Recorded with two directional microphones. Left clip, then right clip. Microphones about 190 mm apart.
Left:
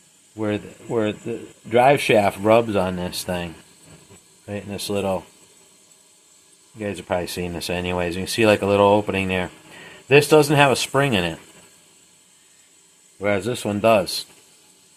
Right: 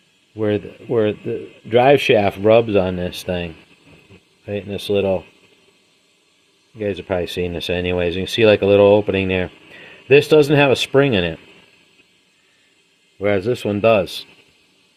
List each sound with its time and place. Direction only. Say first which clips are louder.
0.3 s speech: right 5 dB; 45° right (ahead or behind)
6.7 s speech: right 3 dB; 45° right (ahead or behind)
13.1 s speech: right 4 dB; 45° right (ahead or behind)